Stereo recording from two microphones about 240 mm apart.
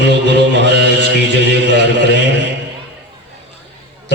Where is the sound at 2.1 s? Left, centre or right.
Left.